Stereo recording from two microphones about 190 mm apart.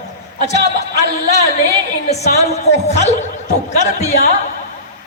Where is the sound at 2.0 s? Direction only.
35° left (ahead or behind).